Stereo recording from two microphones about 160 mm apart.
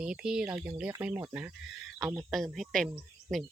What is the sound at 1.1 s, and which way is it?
Speech, 20° right (ahead or behind).